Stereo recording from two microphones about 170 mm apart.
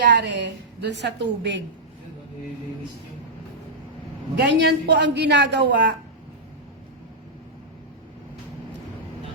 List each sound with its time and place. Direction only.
0.0 s a woman's voice: 85° right
4.4 s a woman's voice: 85° right